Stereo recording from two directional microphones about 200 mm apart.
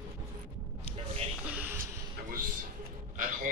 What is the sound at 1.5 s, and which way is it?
Music, 10° right (ahead or behind).